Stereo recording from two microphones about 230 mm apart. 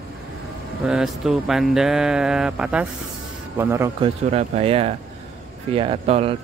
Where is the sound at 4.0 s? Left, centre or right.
Right.